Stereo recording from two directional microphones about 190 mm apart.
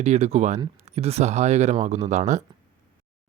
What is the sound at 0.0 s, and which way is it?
Speech, 35° right (ahead or behind).